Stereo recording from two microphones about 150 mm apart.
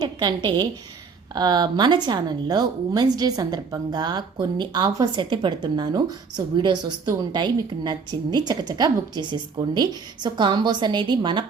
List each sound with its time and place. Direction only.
0.0 s a woman's voice: 30° right (ahead or behind)